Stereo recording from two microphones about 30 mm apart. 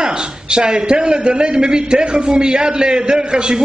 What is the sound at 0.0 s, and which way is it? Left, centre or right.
A man's voice, right.